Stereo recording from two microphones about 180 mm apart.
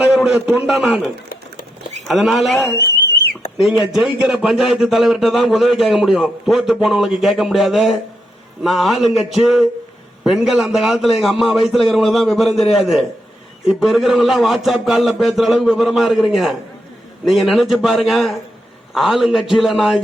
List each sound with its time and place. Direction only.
0.0 s a man's voice: 5° right (ahead or behind)
2.7 s a sound: 60° left (ahead or behind)
3.6 s a man's voice: centre (ahead or behind)